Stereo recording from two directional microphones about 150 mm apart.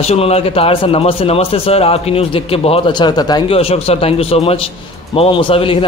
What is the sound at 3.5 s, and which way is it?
A man's voice, 40° left (ahead or behind).